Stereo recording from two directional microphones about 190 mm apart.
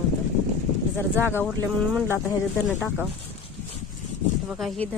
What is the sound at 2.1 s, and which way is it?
Speech, 15° left (ahead or behind).